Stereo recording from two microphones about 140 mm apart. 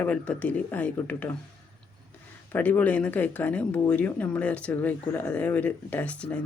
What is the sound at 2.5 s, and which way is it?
Speech, 10° left (ahead or behind).